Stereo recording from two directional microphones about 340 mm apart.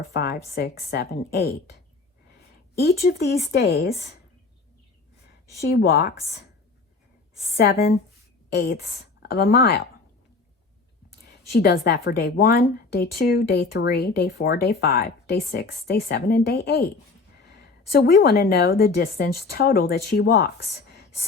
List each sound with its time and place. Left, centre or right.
0.1 s a woman's voice: left
2.7 s a woman's voice: left
5.5 s a woman's voice: left
7.5 s a woman's voice: left
11.3 s a woman's voice: left